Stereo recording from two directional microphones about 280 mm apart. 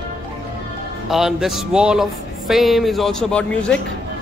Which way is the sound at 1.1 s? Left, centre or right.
Centre.